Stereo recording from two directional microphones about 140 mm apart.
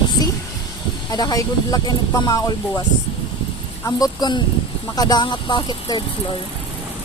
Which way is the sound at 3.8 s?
30° left (ahead or behind).